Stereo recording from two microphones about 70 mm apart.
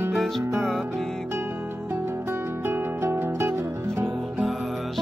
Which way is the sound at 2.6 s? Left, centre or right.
Right.